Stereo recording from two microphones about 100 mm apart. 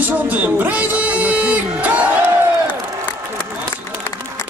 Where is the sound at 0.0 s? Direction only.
15° right (ahead or behind).